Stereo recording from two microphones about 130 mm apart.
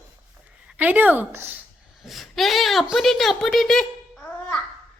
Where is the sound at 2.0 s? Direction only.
Centre (ahead or behind).